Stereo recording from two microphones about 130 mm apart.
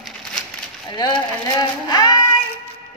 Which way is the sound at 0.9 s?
35° left (ahead or behind).